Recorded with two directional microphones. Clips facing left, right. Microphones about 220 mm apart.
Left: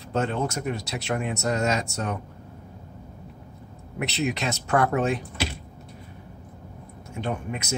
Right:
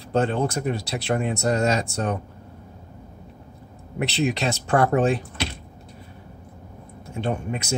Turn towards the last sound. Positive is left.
turn(degrees=-30)  # may be behind; listen again after turning